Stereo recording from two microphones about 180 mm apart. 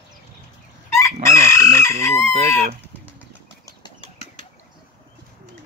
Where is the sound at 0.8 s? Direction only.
15° left (ahead or behind).